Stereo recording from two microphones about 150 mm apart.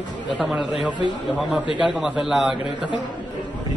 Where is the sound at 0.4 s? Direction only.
5° right (ahead or behind).